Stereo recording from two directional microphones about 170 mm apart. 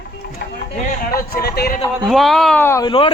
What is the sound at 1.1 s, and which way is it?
Speech, 60° left (ahead or behind).